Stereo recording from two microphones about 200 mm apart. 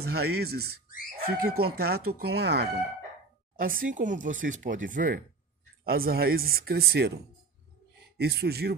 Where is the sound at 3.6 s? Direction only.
45° right (ahead or behind).